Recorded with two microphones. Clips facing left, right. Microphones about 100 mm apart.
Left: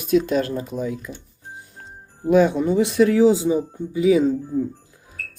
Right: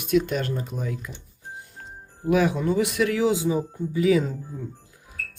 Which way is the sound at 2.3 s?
25° left (ahead or behind).